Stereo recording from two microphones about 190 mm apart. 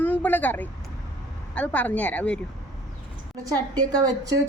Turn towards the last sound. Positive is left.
turn(degrees=-20)  # may be behind; listen again after turning